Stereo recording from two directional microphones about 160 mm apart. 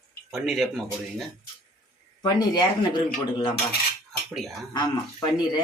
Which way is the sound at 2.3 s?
25° left (ahead or behind).